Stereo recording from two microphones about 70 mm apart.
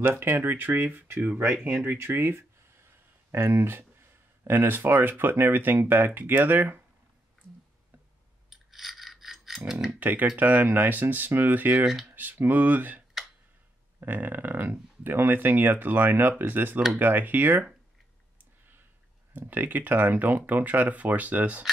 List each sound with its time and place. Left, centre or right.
0.0 s speech: right
8.5 s filing: centre
9.8 s speech: right
11.8 s speech: centre
12.1 s speech: right
19.5 s speech: right